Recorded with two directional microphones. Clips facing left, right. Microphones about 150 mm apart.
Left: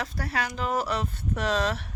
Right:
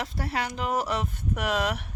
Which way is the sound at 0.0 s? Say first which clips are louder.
Even; 20° right (ahead or behind).